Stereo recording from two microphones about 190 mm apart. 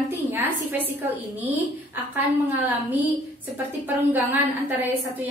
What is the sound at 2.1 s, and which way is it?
A woman's voice, 10° right (ahead or behind).